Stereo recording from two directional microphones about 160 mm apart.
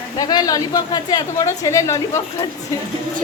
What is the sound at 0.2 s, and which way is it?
A woman's voice, 25° left (ahead or behind).